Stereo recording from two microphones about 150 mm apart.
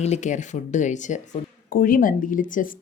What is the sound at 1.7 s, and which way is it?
Speech, 70° left (ahead or behind).